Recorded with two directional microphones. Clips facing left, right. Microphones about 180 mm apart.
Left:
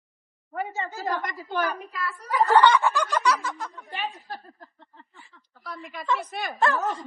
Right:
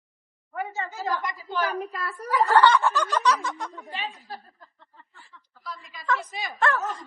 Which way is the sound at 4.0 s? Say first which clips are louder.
Left 4 dB; 50° left (ahead or behind).